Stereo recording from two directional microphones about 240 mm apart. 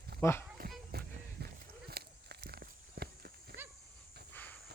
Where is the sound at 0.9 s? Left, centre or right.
Right.